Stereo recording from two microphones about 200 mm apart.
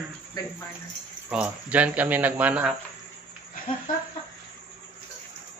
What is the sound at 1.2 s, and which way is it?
Speech, 5° right (ahead or behind).